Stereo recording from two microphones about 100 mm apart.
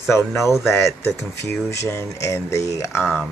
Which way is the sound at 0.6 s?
25° left (ahead or behind).